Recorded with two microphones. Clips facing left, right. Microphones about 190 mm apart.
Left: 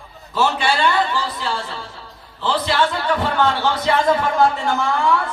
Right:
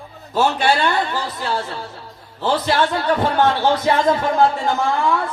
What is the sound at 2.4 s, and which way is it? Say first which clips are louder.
Speech: right 1 dB; 45° right (ahead or behind).